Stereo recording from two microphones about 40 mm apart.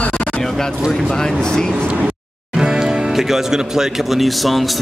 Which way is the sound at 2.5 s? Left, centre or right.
Centre.